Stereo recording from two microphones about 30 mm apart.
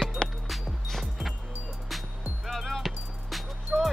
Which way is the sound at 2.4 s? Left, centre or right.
Centre.